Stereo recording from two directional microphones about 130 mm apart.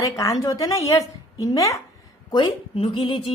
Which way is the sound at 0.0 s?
25° left (ahead or behind).